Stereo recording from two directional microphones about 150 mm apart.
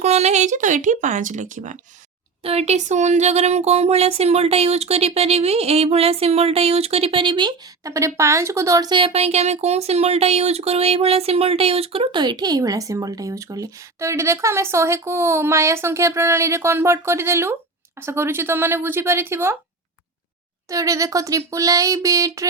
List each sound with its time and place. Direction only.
0.0 s speech: 45° right (ahead or behind)
2.4 s speech: 45° right (ahead or behind); by 19.5 s 15° right (ahead or behind)
20.7 s speech: 20° right (ahead or behind)